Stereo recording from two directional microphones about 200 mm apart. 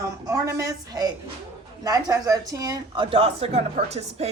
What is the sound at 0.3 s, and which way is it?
A woman's voice, 15° right (ahead or behind).